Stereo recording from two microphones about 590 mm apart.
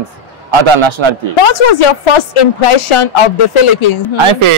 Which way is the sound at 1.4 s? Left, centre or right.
Left.